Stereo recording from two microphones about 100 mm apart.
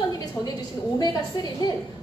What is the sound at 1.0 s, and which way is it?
Speech, 45° left (ahead or behind).